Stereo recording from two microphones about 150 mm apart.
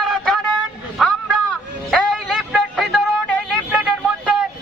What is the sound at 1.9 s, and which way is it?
Music, centre (ahead or behind).